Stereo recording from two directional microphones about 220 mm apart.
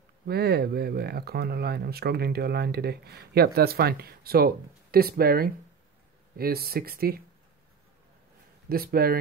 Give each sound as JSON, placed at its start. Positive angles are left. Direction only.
{"t": 0.3, "sound": "speech", "side_deg": -45}
{"t": 8.6, "sound": "speech", "side_deg": -45}